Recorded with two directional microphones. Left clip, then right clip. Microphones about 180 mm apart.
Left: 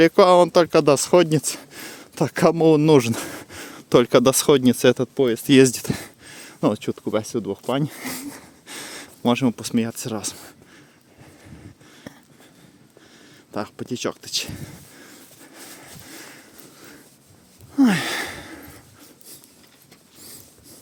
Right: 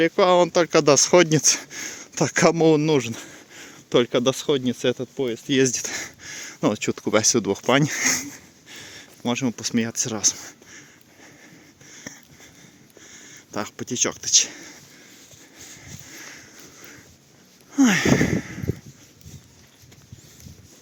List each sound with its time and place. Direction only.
0.0 s speech: 30° left (ahead or behind)
0.7 s speech: 15° left (ahead or behind)
1.8 s speech: 15° left (ahead or behind)
2.8 s speech: 35° left (ahead or behind); by 5.5 s 55° left (ahead or behind)
5.5 s speech: 25° left (ahead or behind)
6.9 s speech: 5° right (ahead or behind)
8.3 s a sound: 35° left (ahead or behind)
9.3 s speech: 25° left (ahead or behind); by 10.8 s 10° left (ahead or behind)
11.9 s a sound: 20° left (ahead or behind)
13.1 s speech: 15° left (ahead or behind)
15.5 s sawing: 35° left (ahead or behind)
17.7 s a sound: 15° left (ahead or behind)